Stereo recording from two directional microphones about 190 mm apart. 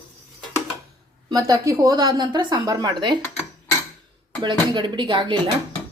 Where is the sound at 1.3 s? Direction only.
20° right (ahead or behind).